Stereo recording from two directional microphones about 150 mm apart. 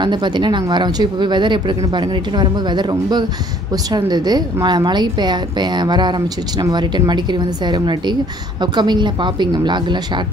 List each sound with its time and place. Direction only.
0.0 s a woman's voice: 30° right (ahead or behind)